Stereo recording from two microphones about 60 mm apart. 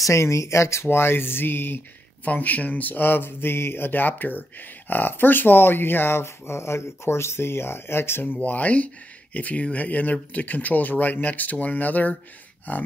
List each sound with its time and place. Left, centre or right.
0.1 s speech: left
0.8 s speech: left
2.2 s speech: left